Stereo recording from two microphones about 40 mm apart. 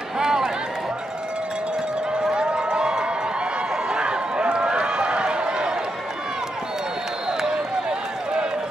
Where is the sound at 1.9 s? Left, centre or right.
Right.